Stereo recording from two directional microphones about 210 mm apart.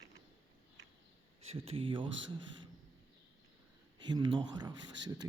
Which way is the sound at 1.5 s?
25° right (ahead or behind).